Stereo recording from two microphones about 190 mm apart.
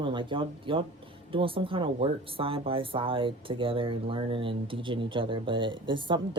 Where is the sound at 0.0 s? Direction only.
25° right (ahead or behind).